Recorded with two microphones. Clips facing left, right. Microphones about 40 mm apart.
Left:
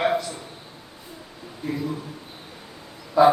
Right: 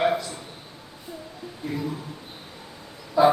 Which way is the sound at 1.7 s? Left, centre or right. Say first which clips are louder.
Left 2 dB; centre.